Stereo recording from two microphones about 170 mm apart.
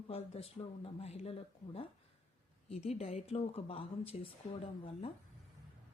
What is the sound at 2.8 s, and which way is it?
Speech, 40° left (ahead or behind).